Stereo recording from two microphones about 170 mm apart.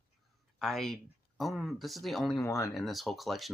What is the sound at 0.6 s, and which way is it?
Speech, centre (ahead or behind).